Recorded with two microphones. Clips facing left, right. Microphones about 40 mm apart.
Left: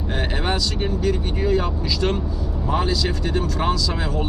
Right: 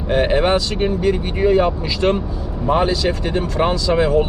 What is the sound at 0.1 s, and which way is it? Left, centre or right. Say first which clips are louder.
Speech: right 10 dB; right.